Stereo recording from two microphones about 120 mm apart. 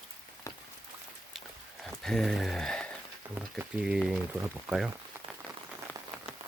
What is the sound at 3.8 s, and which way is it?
Speech, 5° right (ahead or behind).